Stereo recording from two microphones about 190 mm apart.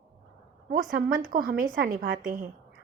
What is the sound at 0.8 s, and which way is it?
A woman's voice, 45° right (ahead or behind).